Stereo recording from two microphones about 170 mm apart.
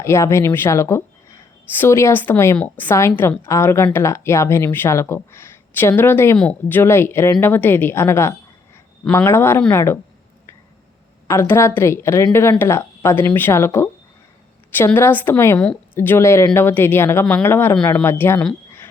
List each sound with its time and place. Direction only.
0.0 s speech: 15° left (ahead or behind)
11.3 s speech: 15° left (ahead or behind)